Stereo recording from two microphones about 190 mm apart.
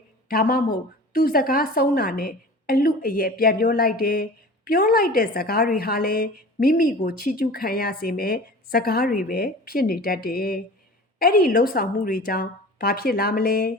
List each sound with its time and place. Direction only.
0.3 s a woman's voice: 50° left (ahead or behind)